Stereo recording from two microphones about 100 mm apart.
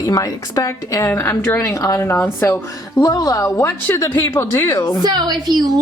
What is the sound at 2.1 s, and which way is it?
Speech, 20° left (ahead or behind).